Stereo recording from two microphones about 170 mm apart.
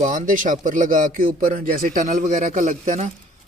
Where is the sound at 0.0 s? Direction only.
50° right (ahead or behind).